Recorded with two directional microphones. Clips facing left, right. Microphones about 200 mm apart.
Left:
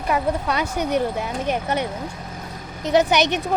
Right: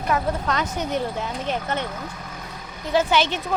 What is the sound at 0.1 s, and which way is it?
A woman's voice, 10° left (ahead or behind).